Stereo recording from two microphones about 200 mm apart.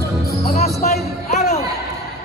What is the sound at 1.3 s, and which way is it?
Basketball bounce, 35° left (ahead or behind).